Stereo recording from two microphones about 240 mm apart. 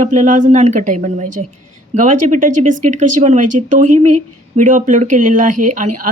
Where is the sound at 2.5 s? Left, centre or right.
Right.